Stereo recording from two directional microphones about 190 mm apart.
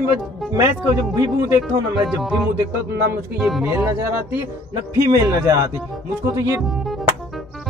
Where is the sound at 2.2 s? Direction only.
Centre (ahead or behind); by 5.6 s 15° right (ahead or behind).